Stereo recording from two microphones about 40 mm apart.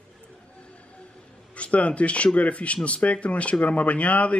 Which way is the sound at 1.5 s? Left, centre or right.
Left.